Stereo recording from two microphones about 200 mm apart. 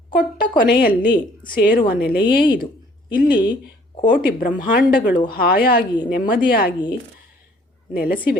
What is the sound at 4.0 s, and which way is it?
A woman's voice, 45° left (ahead or behind).